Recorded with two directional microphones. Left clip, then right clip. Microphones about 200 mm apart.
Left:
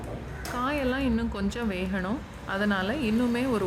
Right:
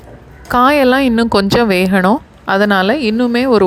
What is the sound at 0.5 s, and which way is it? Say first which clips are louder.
Speech: right 19 dB; 50° right (ahead or behind).